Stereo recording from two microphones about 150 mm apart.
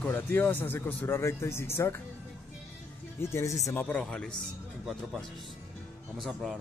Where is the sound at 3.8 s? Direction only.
5° left (ahead or behind).